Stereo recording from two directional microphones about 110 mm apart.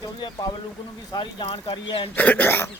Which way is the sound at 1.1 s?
45° left (ahead or behind).